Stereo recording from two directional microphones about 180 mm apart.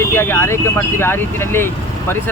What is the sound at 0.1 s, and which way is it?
A man's voice, 15° left (ahead or behind).